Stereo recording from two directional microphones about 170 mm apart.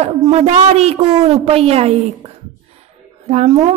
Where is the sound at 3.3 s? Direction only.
40° right (ahead or behind).